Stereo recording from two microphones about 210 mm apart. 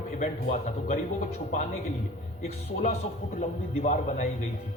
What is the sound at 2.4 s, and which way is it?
A man's voice, 30° left (ahead or behind).